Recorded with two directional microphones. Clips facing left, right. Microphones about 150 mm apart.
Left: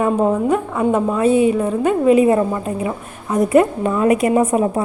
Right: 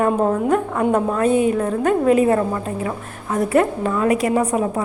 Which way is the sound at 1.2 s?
50° right (ahead or behind).